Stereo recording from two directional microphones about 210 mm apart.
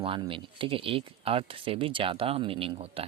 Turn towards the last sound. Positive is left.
turn(degrees=-25)  # may be behind; listen again after turning